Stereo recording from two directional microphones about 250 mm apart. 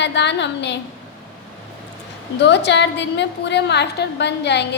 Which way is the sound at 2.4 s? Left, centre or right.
Left.